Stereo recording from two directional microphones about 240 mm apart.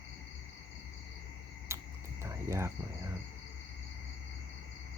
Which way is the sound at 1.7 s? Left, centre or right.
Centre.